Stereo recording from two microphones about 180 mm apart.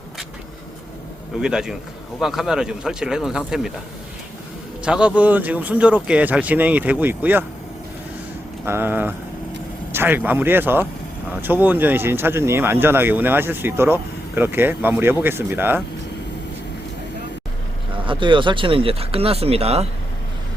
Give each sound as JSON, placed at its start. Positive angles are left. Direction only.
{"t": 1.4, "sound": "speech", "side_deg": -5}
{"t": 4.9, "sound": "speech", "side_deg": -5}
{"t": 8.6, "sound": "speech", "side_deg": -10}
{"t": 17.9, "sound": "speech", "side_deg": -30}